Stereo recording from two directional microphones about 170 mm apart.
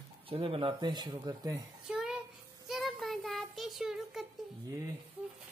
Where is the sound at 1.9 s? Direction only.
5° right (ahead or behind).